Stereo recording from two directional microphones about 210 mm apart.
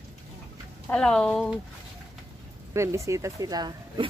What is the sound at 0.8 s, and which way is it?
Speech, 5° left (ahead or behind).